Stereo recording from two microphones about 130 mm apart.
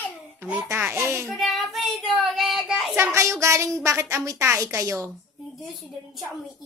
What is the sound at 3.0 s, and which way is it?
A woman's voice, 20° right (ahead or behind).